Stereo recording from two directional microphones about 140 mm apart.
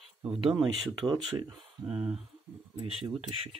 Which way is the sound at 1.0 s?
35° right (ahead or behind).